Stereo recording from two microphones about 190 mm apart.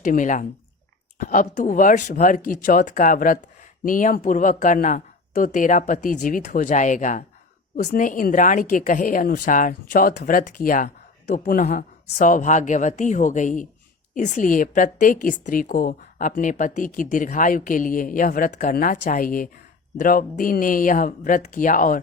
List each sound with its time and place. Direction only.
0.0 s a woman's voice: 45° left (ahead or behind)